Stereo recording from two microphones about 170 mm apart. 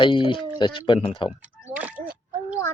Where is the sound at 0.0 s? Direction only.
30° left (ahead or behind).